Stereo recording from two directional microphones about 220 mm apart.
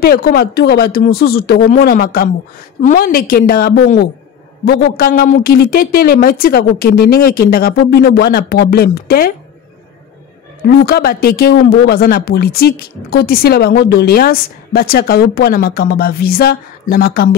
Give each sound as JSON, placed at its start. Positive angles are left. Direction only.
{"t": 0.0, "sound": "a woman's voice", "side_deg": 45}
{"t": 10.9, "sound": "speech", "side_deg": 45}